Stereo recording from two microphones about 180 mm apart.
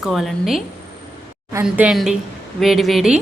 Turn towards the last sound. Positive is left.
turn(degrees=0)  # may be behind; listen again after turning